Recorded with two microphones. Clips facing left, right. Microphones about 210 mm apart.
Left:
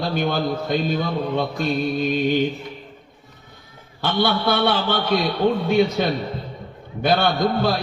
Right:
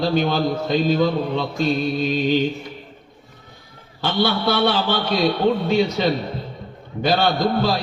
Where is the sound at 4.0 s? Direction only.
55° left (ahead or behind).